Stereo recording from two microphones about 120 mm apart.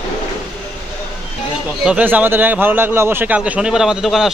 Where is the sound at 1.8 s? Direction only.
10° right (ahead or behind).